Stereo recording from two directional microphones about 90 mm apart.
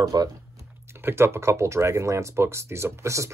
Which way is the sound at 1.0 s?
25° right (ahead or behind).